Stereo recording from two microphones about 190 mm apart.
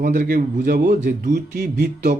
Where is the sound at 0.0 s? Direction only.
50° right (ahead or behind).